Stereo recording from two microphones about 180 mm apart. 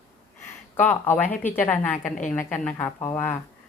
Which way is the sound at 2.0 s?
45° left (ahead or behind).